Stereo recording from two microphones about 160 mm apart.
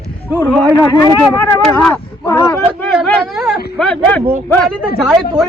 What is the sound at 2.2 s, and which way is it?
Speech, 20° left (ahead or behind).